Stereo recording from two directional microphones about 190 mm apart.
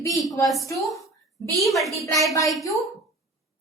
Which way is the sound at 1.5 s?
Centre (ahead or behind).